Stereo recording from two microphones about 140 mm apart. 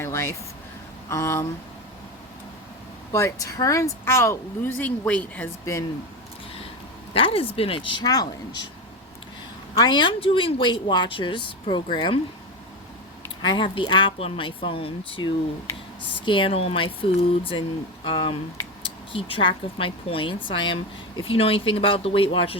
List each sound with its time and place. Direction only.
0.0 s a sound: 20° left (ahead or behind)
1.1 s speech: 20° left (ahead or behind)
3.1 s speech: 20° left (ahead or behind)
7.1 s speech: 40° left (ahead or behind)
8.0 s speech: 30° left (ahead or behind)
9.7 s speech: 35° left (ahead or behind)
13.4 s speech: 35° left (ahead or behind)